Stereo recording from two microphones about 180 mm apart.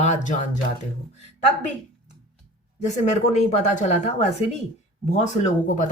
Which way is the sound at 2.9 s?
40° left (ahead or behind).